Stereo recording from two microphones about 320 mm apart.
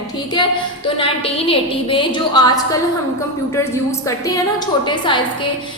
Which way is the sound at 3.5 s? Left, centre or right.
Centre.